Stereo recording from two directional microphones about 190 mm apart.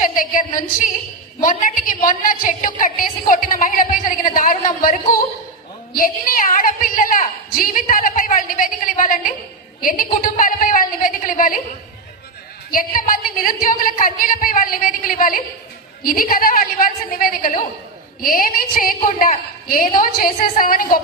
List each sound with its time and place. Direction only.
0.0 s a woman's voice: 45° left (ahead or behind)
12.7 s a woman's voice: 45° left (ahead or behind)